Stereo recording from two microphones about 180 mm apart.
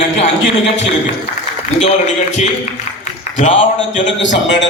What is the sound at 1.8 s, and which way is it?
A man's voice, 40° left (ahead or behind).